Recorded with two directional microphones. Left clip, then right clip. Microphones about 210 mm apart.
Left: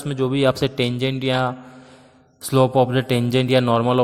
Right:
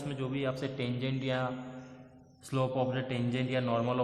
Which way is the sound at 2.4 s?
50° left (ahead or behind).